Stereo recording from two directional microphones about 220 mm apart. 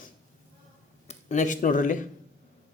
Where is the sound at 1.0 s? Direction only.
35° left (ahead or behind).